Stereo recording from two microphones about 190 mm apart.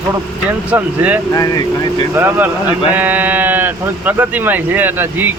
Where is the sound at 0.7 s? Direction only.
10° right (ahead or behind).